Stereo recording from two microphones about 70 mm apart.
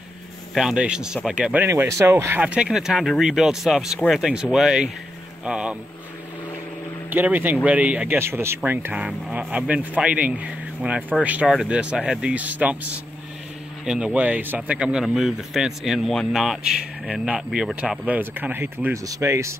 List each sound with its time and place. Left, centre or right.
0.6 s speech: centre
1.9 s speech: right
2.4 s speech: centre
2.7 s speech: centre
7.1 s speech: right
8.2 s speech: right
8.9 s speech: centre
13.8 s speech: centre
14.7 s speech: centre
17.7 s speech: centre
19.0 s speech: right